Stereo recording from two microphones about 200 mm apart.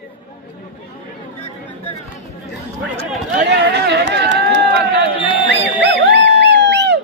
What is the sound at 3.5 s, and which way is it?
Run, 60° right (ahead or behind).